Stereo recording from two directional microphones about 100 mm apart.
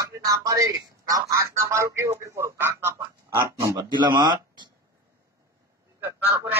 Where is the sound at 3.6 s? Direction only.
35° right (ahead or behind).